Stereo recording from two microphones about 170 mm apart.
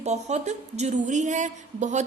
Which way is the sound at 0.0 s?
40° right (ahead or behind).